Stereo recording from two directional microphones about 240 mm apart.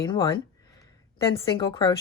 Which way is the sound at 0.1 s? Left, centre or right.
Centre.